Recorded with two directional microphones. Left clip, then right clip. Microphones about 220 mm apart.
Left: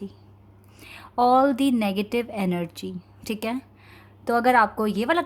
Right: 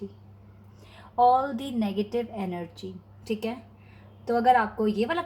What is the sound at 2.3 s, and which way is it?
Speech, 45° left (ahead or behind).